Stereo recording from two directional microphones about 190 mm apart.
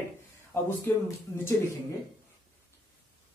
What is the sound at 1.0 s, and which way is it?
Speech, 15° left (ahead or behind).